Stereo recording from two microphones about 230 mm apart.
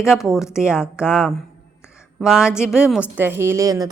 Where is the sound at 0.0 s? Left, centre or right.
Centre.